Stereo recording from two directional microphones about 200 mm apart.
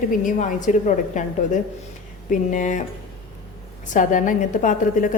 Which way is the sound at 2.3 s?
40° left (ahead or behind).